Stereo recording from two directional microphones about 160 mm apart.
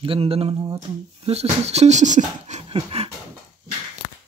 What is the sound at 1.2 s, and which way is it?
Speech, 40° right (ahead or behind).